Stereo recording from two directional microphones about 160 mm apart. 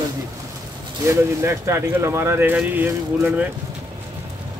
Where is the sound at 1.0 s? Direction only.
20° right (ahead or behind).